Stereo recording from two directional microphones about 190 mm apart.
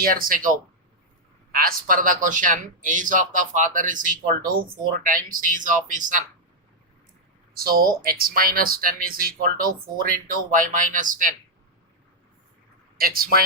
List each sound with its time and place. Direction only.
0.0 s speech: 50° right (ahead or behind)
1.5 s speech: 50° right (ahead or behind)
7.5 s speech: 50° right (ahead or behind)
13.0 s speech: 50° right (ahead or behind)